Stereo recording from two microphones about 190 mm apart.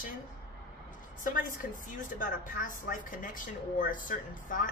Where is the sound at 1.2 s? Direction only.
45° left (ahead or behind).